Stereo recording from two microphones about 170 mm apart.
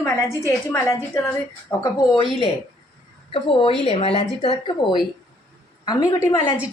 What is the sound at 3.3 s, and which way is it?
Speech, 30° left (ahead or behind).